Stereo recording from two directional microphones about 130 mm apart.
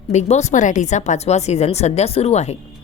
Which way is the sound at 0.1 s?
60° left (ahead or behind).